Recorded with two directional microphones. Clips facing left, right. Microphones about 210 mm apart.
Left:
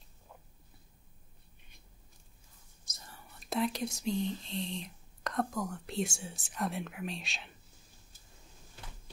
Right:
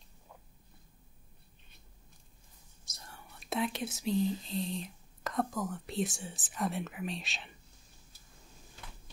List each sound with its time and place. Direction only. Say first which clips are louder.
2.8 s speech: right 1 dB; centre (ahead or behind)